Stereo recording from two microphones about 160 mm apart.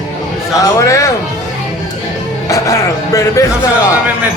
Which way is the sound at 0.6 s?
20° left (ahead or behind).